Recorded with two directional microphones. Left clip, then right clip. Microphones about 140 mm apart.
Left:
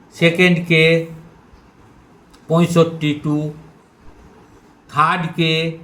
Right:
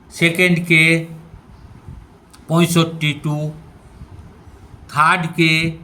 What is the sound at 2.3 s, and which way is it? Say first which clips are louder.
A man's voice: left 1 dB; 35° right (ahead or behind).